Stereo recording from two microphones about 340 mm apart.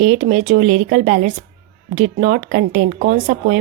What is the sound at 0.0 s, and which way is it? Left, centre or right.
Speech, right.